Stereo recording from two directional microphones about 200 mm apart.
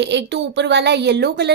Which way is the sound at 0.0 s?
60° right (ahead or behind).